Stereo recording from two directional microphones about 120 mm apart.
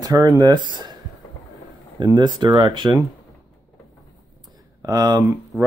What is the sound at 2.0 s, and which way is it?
Speech, 35° right (ahead or behind).